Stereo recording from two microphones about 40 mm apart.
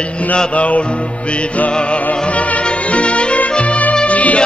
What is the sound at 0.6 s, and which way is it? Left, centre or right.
Music, left.